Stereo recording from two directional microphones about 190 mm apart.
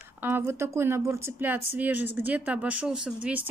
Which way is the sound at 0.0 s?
10° right (ahead or behind).